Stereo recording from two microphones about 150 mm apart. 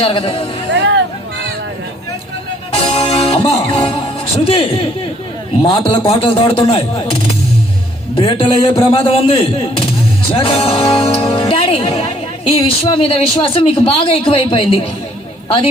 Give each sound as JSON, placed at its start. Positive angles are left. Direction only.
{"t": 0.0, "sound": "speech", "side_deg": 40}
{"t": 2.7, "sound": "music", "side_deg": 40}
{"t": 4.4, "sound": "speech", "side_deg": 40}